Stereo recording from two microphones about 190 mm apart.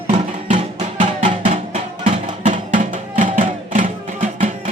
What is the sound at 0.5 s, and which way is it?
Music, 30° right (ahead or behind).